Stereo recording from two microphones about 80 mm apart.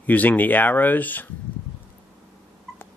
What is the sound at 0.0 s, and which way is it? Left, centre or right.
Speech, left.